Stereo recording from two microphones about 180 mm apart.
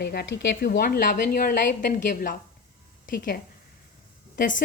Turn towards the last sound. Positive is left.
turn(degrees=50)  # may be behind; listen again after turning